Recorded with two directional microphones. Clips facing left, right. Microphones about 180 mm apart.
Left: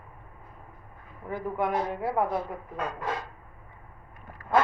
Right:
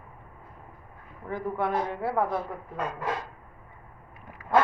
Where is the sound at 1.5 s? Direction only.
15° left (ahead or behind).